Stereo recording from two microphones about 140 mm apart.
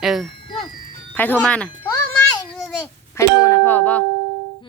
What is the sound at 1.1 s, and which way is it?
Speech, 10° left (ahead or behind).